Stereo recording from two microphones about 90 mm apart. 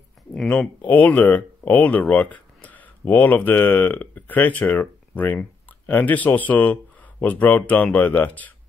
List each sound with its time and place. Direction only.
0.3 s speech: 10° left (ahead or behind)